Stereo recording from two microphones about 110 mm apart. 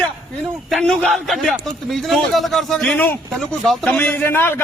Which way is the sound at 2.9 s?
20° left (ahead or behind).